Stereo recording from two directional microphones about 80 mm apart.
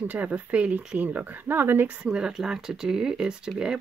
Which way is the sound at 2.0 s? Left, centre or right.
Centre.